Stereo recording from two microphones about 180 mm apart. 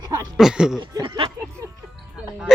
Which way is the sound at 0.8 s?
25° right (ahead or behind).